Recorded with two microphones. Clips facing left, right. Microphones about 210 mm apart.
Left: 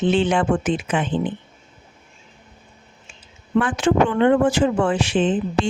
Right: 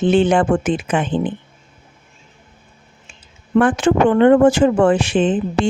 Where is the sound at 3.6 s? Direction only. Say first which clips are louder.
Right 4 dB; 50° right (ahead or behind).